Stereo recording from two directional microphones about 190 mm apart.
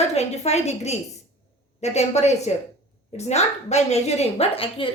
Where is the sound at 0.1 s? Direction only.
35° left (ahead or behind).